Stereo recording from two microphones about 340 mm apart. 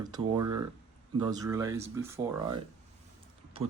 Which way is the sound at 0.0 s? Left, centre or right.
Centre.